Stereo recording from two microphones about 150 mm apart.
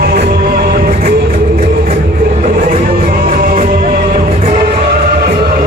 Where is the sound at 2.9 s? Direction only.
85° right.